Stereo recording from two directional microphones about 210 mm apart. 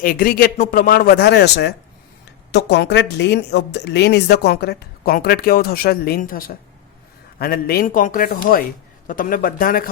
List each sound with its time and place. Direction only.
0.0 s a man's voice: 45° left (ahead or behind)